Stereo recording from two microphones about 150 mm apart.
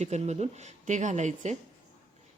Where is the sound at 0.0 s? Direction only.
50° right (ahead or behind).